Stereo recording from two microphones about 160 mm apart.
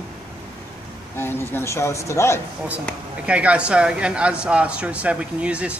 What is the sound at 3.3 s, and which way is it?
Speech, 10° right (ahead or behind).